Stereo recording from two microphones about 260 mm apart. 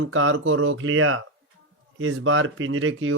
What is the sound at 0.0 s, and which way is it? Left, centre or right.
Speech, right.